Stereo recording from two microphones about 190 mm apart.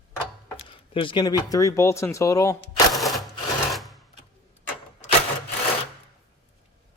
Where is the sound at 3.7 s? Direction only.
Centre (ahead or behind).